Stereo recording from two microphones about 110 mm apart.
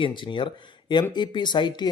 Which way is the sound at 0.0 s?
45° left (ahead or behind).